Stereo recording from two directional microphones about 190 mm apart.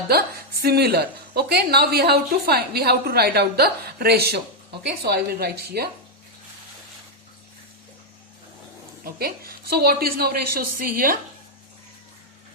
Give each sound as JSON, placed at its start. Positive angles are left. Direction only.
{"t": 0.1, "sound": "a woman's voice", "side_deg": -55}
{"t": 9.0, "sound": "a woman's voice", "side_deg": -55}